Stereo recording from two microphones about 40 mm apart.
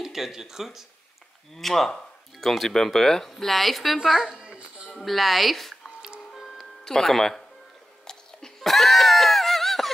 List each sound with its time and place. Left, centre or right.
0.0 s speech: centre
1.5 s speech: centre
4.4 s dog: right
4.9 s speech: centre
6.3 s music: centre
8.5 s screaming: centre